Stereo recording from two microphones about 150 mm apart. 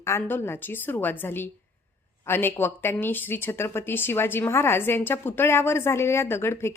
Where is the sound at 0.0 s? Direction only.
15° left (ahead or behind).